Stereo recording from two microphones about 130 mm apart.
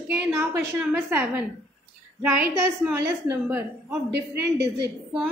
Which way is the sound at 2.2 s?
15° right (ahead or behind).